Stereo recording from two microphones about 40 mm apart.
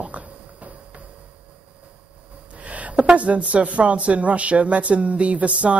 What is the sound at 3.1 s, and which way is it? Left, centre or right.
Speech, right.